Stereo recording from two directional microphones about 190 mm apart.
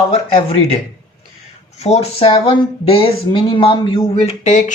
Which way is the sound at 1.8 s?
30° left (ahead or behind).